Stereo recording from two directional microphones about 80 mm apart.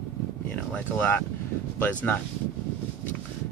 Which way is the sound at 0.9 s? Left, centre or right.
Left.